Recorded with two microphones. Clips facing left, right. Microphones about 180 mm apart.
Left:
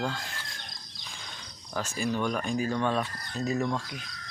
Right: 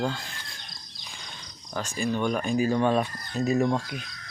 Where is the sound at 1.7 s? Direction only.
5° left (ahead or behind).